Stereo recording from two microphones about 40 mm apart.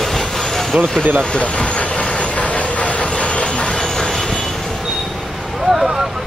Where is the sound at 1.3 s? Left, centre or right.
Left; by 4.4 s centre.